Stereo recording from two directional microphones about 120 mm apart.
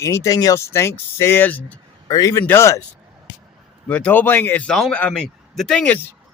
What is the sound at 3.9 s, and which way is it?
A man's voice, 10° left (ahead or behind).